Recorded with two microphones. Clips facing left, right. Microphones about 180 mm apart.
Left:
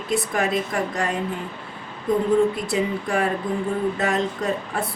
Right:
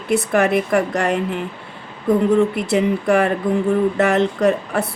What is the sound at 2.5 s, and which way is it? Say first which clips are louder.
Speech: right 6 dB; 70° right (ahead or behind).